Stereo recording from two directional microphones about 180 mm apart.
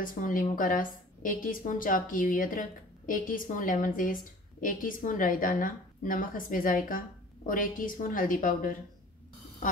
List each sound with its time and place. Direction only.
0.0 s a woman's voice: 50° left (ahead or behind)